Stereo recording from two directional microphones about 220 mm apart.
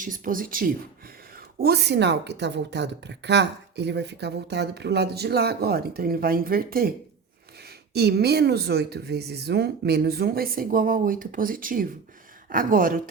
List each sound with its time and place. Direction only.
0.0 s speech: 40° right (ahead or behind)
7.9 s speech: 45° right (ahead or behind)